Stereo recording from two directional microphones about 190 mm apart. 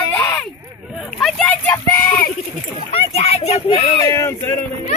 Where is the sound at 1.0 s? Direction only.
Centre (ahead or behind).